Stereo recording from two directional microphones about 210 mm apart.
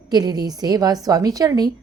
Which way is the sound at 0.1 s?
20° right (ahead or behind).